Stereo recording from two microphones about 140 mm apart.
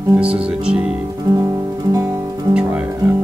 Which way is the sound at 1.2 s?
25° right (ahead or behind).